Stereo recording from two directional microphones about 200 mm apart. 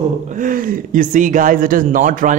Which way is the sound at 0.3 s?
40° right (ahead or behind).